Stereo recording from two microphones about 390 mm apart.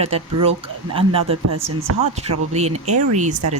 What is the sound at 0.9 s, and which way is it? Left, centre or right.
Speech, centre.